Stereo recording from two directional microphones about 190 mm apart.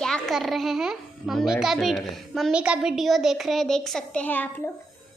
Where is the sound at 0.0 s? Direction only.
Centre (ahead or behind).